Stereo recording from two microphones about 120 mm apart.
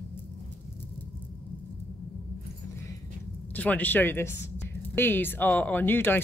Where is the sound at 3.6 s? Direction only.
15° left (ahead or behind).